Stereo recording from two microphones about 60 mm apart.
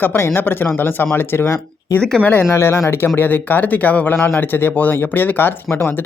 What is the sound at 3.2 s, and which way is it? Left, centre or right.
Speech, left.